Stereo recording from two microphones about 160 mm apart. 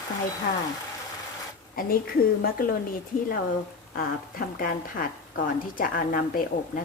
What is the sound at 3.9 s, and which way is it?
A woman's voice, 65° left (ahead or behind).